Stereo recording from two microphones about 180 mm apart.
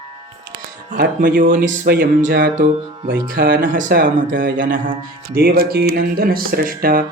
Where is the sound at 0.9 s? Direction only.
50° right (ahead or behind).